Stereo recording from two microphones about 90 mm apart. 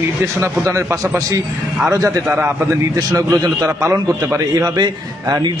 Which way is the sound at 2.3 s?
25° right (ahead or behind).